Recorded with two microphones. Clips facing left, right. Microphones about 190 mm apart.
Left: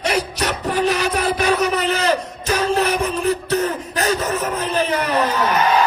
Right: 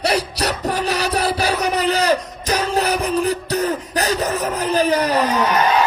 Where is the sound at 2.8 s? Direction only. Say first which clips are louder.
Even; 35° right (ahead or behind).